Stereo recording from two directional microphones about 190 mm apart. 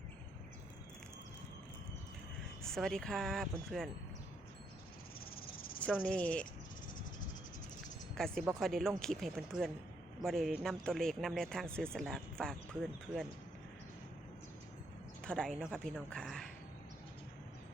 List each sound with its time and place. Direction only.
2.6 s speech: centre (ahead or behind)
5.2 s cricket: 50° left (ahead or behind)
5.8 s speech: 5° left (ahead or behind)
8.1 s speech: 5° left (ahead or behind)
15.2 s speech: 5° left (ahead or behind)